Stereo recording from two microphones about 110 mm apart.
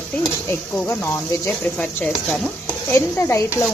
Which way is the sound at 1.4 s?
10° left (ahead or behind).